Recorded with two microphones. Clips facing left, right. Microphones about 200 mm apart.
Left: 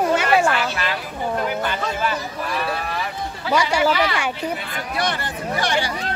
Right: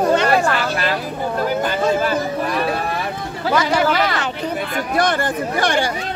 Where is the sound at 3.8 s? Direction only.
45° right (ahead or behind).